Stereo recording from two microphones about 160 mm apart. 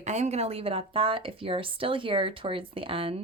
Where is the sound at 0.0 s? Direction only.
45° right (ahead or behind).